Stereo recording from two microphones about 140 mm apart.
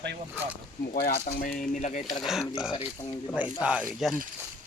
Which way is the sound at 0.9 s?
75° left (ahead or behind).